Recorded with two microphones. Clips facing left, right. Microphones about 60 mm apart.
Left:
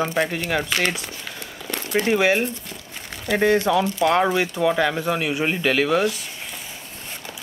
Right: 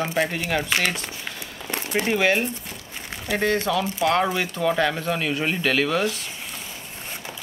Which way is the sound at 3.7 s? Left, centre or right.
Centre.